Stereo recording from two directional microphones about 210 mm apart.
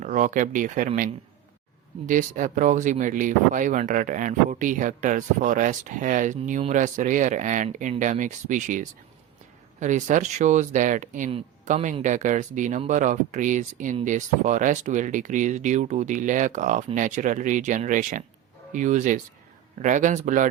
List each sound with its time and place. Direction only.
0.0 s speech: 40° right (ahead or behind)